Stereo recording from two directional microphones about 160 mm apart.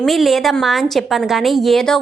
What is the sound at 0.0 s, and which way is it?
A woman's voice, centre (ahead or behind).